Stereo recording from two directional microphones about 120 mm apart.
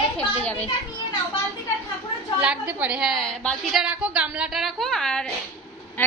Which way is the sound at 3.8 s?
10° right (ahead or behind).